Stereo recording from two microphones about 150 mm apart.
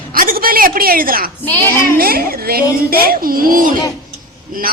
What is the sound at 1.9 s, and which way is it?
A child's voice, 80° right.